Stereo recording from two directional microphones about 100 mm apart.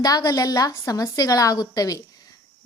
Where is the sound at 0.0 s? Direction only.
40° left (ahead or behind).